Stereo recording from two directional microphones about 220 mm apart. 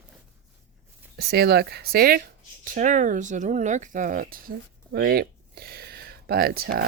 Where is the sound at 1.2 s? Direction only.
45° right (ahead or behind).